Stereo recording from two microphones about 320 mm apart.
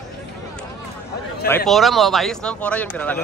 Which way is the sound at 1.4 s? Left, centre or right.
Centre.